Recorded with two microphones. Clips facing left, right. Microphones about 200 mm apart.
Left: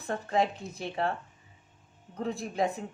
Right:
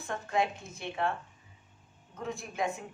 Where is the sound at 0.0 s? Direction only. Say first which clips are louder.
Left 3 dB; 35° left (ahead or behind).